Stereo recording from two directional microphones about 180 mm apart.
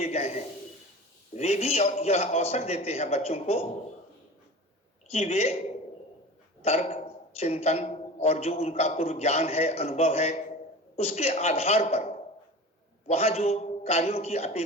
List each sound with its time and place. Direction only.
0.0 s a man's voice: 35° left (ahead or behind)
5.1 s a man's voice: 35° left (ahead or behind)